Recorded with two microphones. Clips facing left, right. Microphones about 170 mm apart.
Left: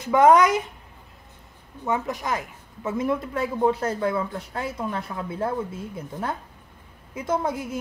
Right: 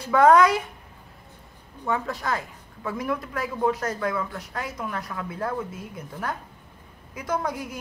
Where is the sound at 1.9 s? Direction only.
20° left (ahead or behind).